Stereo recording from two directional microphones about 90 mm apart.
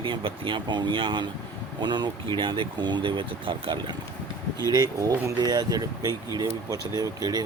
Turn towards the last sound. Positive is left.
turn(degrees=-45)  # may be behind; listen again after turning